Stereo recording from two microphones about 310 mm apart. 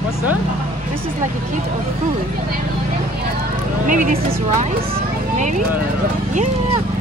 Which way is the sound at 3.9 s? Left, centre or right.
Right.